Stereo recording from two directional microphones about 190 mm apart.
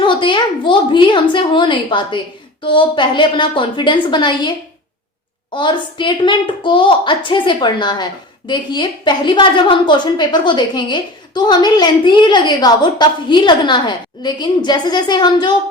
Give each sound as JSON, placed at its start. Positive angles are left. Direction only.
{"t": 0.0, "sound": "a woman's voice", "side_deg": 25}